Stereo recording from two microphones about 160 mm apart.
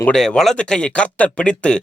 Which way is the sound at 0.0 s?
5° left (ahead or behind).